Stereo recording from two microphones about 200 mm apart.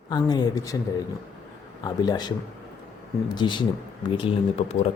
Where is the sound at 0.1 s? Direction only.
20° left (ahead or behind).